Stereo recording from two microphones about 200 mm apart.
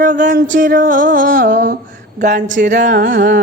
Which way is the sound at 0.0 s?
40° right (ahead or behind).